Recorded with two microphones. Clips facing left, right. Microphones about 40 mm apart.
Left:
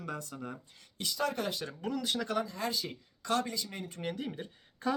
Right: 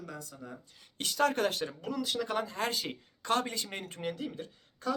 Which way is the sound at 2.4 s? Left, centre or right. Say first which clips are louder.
Right 2 dB; right.